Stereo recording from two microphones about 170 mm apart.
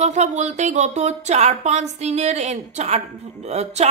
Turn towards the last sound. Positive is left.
turn(degrees=-40)  # may be behind; listen again after turning